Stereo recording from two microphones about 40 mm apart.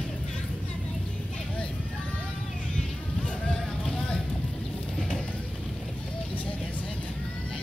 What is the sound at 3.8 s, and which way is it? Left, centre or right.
Vehicle, left.